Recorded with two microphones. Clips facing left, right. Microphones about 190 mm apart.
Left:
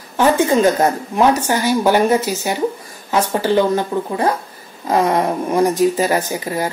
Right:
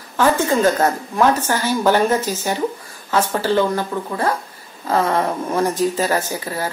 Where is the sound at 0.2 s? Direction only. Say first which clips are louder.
Left 3 dB; 15° left (ahead or behind).